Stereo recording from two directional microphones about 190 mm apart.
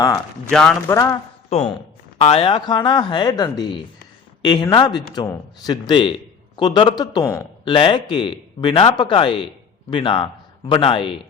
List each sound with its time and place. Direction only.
0.5 s a man's voice: centre (ahead or behind)
0.9 s speech: 15° left (ahead or behind)
1.5 s speech: 35° left (ahead or behind)